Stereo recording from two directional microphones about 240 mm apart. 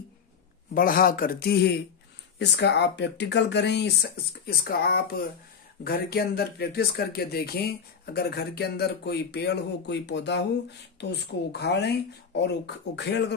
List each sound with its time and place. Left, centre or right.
0.7 s speech: left